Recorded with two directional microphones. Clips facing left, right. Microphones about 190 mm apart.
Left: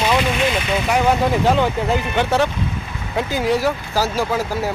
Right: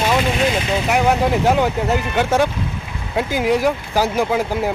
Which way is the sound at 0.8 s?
10° right (ahead or behind).